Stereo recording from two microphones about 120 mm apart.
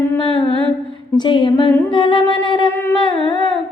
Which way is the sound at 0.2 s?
45° left (ahead or behind).